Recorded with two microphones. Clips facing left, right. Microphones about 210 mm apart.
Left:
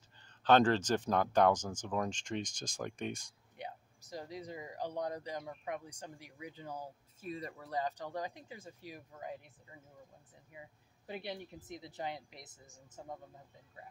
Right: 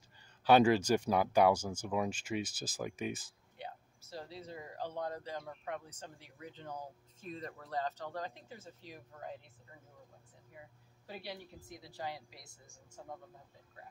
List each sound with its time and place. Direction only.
0.2 s speech: 10° right (ahead or behind)
3.5 s speech: 15° left (ahead or behind)
11.1 s speech: 20° left (ahead or behind)